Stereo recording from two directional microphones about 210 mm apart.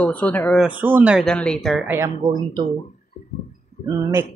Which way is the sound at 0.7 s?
10° right (ahead or behind).